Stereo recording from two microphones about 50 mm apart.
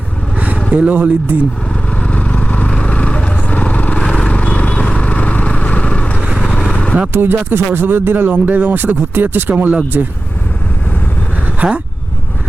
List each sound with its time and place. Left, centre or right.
0.3 s vehicle: right
0.7 s speech: right
1.9 s vehicle: left
7.1 s speech: right
11.6 s speech: right